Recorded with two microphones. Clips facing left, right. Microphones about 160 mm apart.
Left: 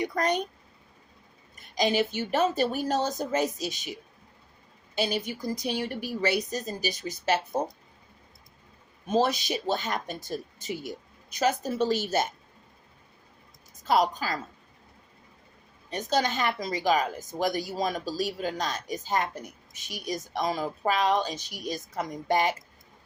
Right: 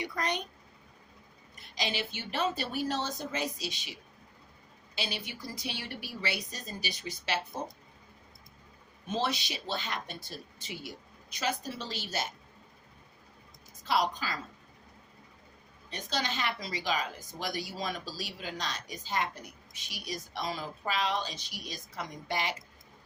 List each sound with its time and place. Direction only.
0.0 s speech: 45° left (ahead or behind)
1.7 s speech: 45° left (ahead or behind)
4.9 s speech: 45° left (ahead or behind)
9.0 s speech: 45° left (ahead or behind)
13.8 s speech: 45° left (ahead or behind)
15.9 s speech: 45° left (ahead or behind)